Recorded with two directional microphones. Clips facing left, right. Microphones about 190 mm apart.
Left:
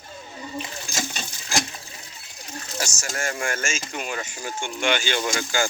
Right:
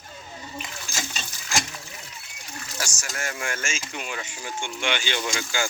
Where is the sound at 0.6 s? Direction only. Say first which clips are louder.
Left 5 dB; 30° left (ahead or behind).